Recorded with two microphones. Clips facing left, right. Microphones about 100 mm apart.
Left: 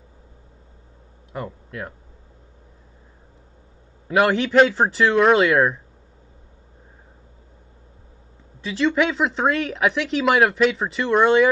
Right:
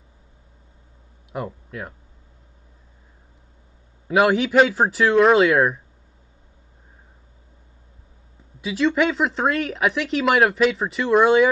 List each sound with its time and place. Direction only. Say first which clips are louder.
1.3 s speech: right 1 dB; 5° right (ahead or behind)
4.1 s speech: right 1 dB; centre (ahead or behind)
8.5 s speech: even; 5° right (ahead or behind)